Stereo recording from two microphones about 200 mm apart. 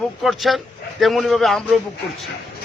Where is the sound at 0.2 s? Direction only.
Centre (ahead or behind).